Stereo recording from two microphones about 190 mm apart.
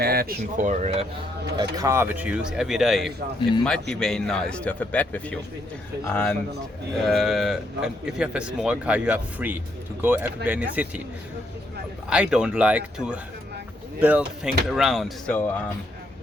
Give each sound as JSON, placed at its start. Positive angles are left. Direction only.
{"t": 0.0, "sound": "speech", "side_deg": -55}
{"t": 1.7, "sound": "speech", "side_deg": -15}
{"t": 12.0, "sound": "speech", "side_deg": -5}